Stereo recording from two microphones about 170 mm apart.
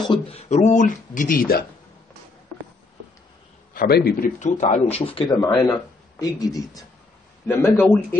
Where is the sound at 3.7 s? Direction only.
65° left (ahead or behind); by 5.3 s 30° left (ahead or behind).